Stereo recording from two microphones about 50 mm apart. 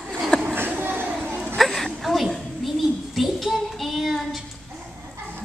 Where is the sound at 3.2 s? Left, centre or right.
Centre.